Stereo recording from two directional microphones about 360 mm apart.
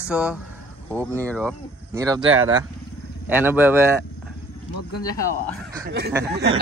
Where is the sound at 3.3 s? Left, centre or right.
Centre.